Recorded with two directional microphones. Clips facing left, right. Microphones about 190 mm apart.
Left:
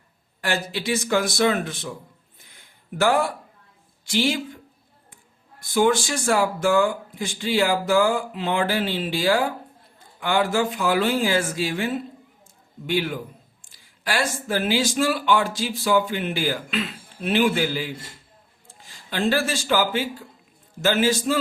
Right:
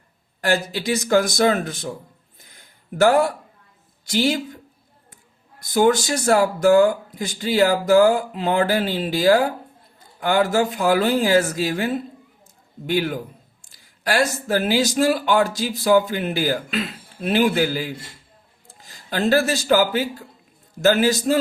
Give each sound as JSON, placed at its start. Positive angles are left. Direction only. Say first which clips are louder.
{"t": 0.4, "sound": "speech", "louder": "right 4 dB", "side_deg": -40}
{"t": 2.4, "sound": "a sound", "louder": "right 2 dB", "side_deg": -40}
{"t": 4.0, "sound": "speech", "louder": "right 2 dB", "side_deg": -40}
{"t": 5.6, "sound": "speech", "louder": "right 3 dB", "side_deg": -40}